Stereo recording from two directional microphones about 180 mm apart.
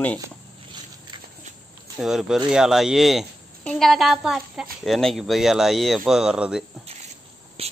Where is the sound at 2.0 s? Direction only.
Centre (ahead or behind).